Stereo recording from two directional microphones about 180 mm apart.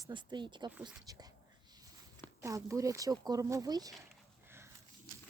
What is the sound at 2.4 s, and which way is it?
Speech, 15° right (ahead or behind).